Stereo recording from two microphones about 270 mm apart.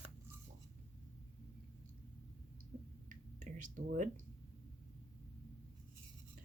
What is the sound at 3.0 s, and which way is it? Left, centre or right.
Finger snapping, right.